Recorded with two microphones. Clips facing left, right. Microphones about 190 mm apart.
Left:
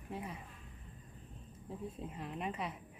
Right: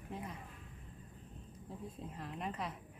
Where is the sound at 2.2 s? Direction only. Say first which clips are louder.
Left 1 dB; 5° left (ahead or behind).